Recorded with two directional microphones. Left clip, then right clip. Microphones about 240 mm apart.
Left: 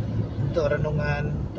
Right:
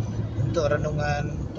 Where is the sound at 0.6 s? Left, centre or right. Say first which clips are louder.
Even; centre.